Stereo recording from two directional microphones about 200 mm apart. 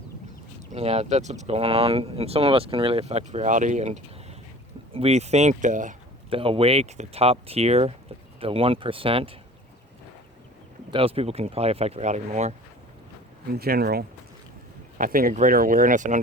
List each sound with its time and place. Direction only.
0.7 s speech: 30° right (ahead or behind)
6.3 s speech: 25° right (ahead or behind)
10.9 s speech: 30° right (ahead or behind)
13.5 s speech: 50° right (ahead or behind)